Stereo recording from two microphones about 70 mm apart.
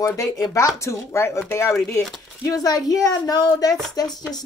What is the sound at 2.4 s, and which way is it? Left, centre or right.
Speech, left.